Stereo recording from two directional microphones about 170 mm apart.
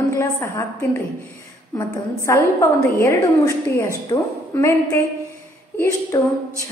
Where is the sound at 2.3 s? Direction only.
15° left (ahead or behind).